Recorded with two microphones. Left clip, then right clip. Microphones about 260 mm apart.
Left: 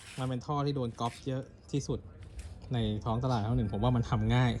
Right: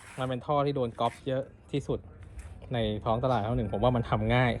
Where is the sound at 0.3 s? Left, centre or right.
Centre.